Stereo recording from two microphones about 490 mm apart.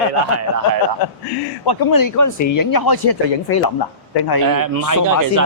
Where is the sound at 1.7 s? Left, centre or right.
Left.